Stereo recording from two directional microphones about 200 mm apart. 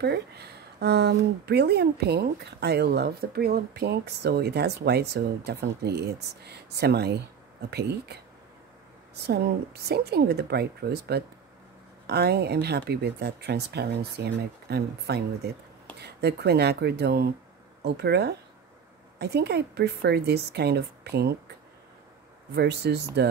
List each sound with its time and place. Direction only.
0.0 s speech: 55° right (ahead or behind)
22.6 s speech: 55° right (ahead or behind)